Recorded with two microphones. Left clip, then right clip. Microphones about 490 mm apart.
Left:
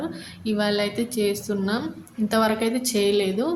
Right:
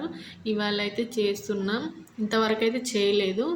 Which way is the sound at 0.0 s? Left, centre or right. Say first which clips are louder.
Left 3 dB; left.